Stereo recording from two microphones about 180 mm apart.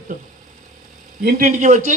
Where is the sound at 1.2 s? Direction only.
50° right (ahead or behind).